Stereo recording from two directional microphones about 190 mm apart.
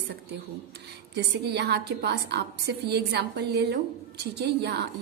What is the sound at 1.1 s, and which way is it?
A woman's voice, 60° right (ahead or behind).